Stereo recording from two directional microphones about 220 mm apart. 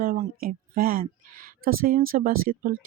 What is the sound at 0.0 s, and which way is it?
A woman's voice, 40° right (ahead or behind).